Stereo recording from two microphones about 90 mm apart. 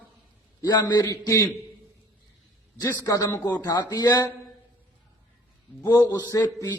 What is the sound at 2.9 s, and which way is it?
A man's voice, 40° left (ahead or behind).